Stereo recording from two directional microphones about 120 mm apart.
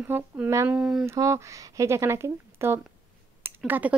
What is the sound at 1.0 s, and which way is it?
A woman's voice, 25° right (ahead or behind).